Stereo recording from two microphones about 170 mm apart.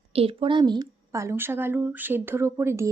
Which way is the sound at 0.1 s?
35° right (ahead or behind).